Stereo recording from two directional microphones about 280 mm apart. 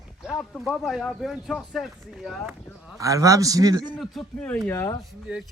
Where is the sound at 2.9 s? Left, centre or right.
Centre.